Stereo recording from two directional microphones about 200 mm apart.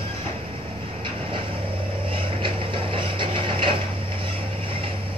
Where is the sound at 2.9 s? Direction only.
25° right (ahead or behind).